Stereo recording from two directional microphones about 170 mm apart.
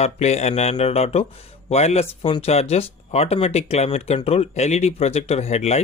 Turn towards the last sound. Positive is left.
turn(degrees=40)  # may be behind; listen again after turning